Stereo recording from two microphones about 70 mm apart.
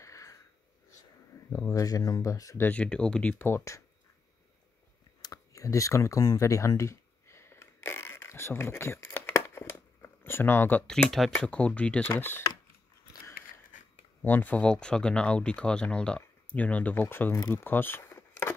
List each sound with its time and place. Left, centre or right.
0.0 s a sound: left
1.5 s speech: left
2.7 s speech: centre
3.3 s speech: left
5.2 s speech: left
6.8 s a sound: left
10.9 s speech: centre
11.4 s speech: centre
12.1 s speech: left
14.2 s speech: left
14.6 s speech: centre; by 17.4 s left
17.5 s a sound: left